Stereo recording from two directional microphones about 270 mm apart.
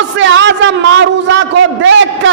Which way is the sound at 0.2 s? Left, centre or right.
Right.